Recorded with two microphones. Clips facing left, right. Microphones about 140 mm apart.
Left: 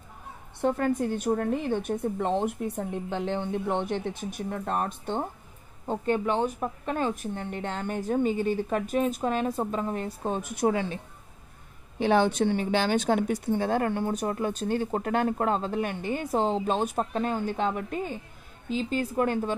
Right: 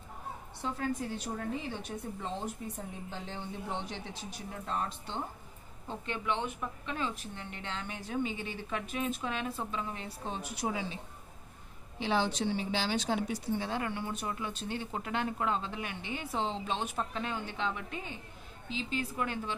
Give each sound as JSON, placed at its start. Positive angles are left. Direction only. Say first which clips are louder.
{"t": 0.6, "sound": "a woman's voice", "louder": "left 10 dB", "side_deg": 55}
{"t": 12.0, "sound": "a woman's voice", "louder": "left 8 dB", "side_deg": 55}